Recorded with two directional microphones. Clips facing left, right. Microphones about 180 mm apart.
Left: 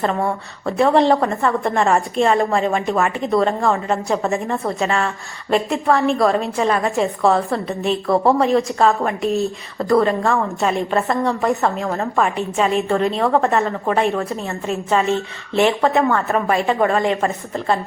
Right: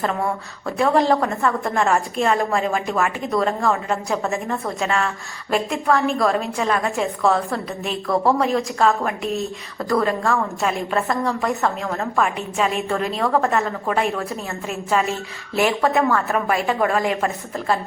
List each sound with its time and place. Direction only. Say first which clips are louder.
0.6 s a woman's voice: left 3 dB; centre (ahead or behind)
8.0 s a woman's voice: left 2 dB; 25° left (ahead or behind)
8.4 s a woman's voice: left 4 dB; centre (ahead or behind)